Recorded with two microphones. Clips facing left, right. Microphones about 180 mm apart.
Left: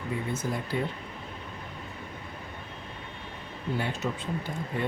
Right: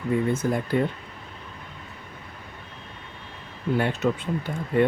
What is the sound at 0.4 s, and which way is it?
Speech, 60° right (ahead or behind).